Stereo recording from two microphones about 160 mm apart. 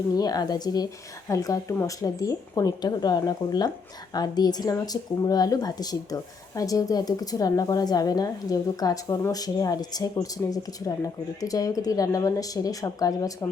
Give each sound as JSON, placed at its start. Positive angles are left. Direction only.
{"t": 0.2, "sound": "speech", "side_deg": 25}